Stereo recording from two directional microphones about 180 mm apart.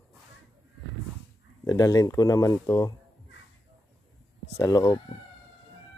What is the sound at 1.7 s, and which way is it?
Speech, 20° left (ahead or behind).